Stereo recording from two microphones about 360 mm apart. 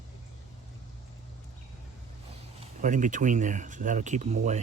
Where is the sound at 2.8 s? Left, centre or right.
Right.